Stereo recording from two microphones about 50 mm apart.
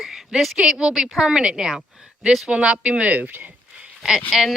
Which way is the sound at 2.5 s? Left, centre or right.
Right.